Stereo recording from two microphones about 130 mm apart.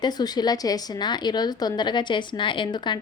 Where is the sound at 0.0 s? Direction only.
30° left (ahead or behind).